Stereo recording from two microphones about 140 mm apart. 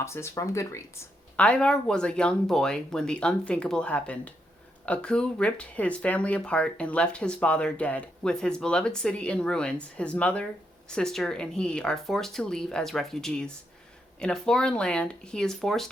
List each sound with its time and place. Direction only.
0.0 s speech: 20° left (ahead or behind)
1.4 s speech: 5° left (ahead or behind)